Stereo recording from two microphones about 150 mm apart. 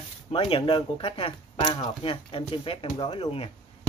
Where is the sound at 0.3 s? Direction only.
35° left (ahead or behind).